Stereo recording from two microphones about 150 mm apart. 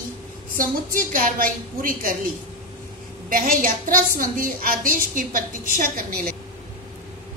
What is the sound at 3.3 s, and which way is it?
A woman's voice, 65° right (ahead or behind).